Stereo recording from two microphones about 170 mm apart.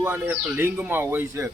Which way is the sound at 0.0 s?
10° right (ahead or behind).